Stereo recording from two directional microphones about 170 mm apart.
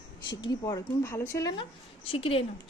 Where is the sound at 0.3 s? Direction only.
25° left (ahead or behind).